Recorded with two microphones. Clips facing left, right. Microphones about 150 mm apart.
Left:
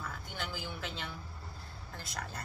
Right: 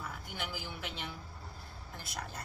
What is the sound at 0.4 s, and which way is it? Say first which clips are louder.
Speech: left 1 dB; 10° right (ahead or behind).